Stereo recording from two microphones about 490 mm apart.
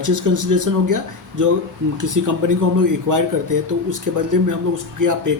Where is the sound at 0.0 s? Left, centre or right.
Right.